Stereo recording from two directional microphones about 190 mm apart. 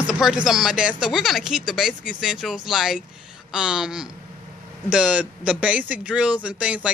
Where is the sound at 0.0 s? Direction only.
5° right (ahead or behind).